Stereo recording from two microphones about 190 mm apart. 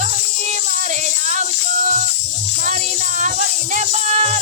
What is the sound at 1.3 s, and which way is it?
Music, 40° right (ahead or behind).